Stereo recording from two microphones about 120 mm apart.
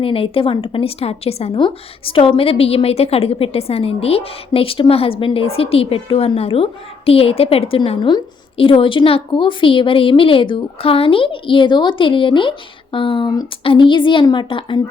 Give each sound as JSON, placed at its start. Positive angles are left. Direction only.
{"t": 0.0, "sound": "a woman's voice", "side_deg": 50}
{"t": 1.5, "sound": "a woman's voice", "side_deg": 45}
{"t": 7.9, "sound": "a woman's voice", "side_deg": 40}